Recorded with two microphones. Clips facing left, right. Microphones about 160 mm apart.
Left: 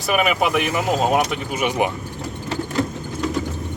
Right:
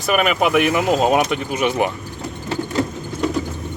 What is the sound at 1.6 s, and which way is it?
Speech, 15° left (ahead or behind).